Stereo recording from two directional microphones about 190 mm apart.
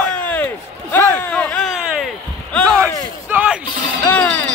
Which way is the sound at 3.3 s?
10° right (ahead or behind).